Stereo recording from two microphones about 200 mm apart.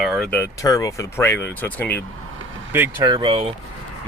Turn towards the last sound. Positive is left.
turn(degrees=-25)  # may be behind; listen again after turning